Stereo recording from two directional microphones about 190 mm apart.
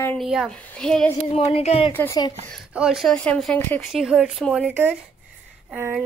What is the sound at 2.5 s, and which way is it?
Speech, 5° right (ahead or behind).